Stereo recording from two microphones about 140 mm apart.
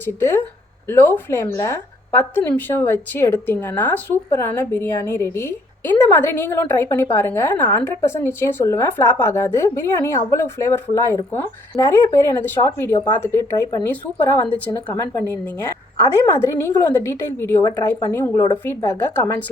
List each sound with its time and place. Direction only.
0.0 s a woman's voice: 15° left (ahead or behind)
14.5 s a woman's voice: 15° left (ahead or behind)